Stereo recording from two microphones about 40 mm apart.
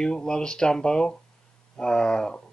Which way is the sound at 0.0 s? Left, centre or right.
Centre.